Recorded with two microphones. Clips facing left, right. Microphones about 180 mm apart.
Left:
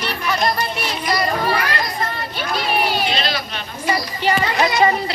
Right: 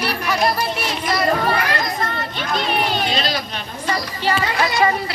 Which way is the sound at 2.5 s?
5° left (ahead or behind).